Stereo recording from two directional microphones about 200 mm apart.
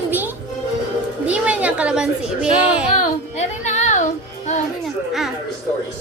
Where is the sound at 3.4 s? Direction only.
35° left (ahead or behind).